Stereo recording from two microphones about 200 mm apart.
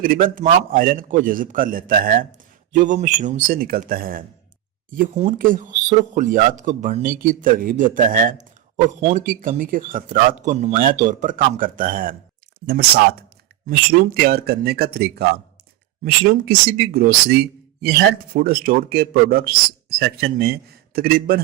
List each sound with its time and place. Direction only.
0.0 s speech: 45° right (ahead or behind)